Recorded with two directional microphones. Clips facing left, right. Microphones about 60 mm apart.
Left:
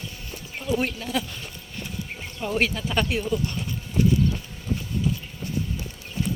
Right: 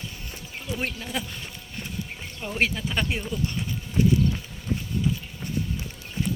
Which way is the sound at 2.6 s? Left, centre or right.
Centre.